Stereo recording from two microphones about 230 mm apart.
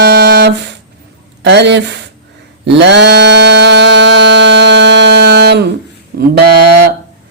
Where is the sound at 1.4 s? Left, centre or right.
Right.